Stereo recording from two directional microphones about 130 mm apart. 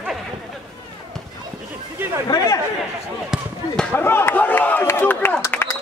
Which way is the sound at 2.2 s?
25° left (ahead or behind).